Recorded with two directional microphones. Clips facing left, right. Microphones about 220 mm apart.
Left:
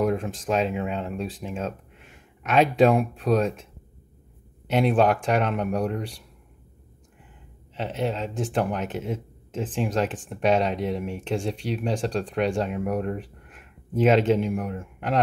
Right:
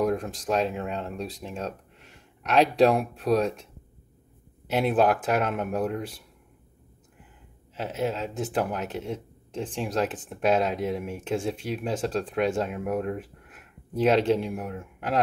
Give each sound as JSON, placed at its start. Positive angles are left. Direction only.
{"t": 0.0, "sound": "speech", "side_deg": 0}
{"t": 4.6, "sound": "speech", "side_deg": 0}
{"t": 7.7, "sound": "speech", "side_deg": 0}